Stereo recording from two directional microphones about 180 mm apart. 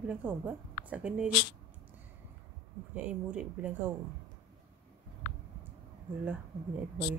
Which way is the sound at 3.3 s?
5° right (ahead or behind).